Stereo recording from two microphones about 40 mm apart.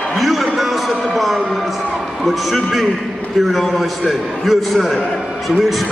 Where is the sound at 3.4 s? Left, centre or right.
Centre.